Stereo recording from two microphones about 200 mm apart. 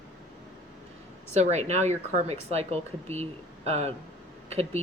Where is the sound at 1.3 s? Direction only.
35° right (ahead or behind).